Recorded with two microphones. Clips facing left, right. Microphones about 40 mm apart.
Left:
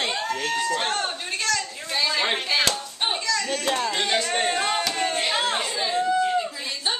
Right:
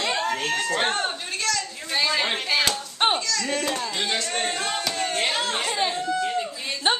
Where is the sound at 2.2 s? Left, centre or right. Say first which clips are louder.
Even; centre.